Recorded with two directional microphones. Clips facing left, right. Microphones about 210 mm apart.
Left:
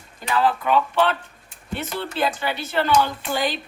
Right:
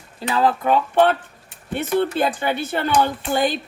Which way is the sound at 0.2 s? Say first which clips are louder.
Right 2 dB; 40° right (ahead or behind).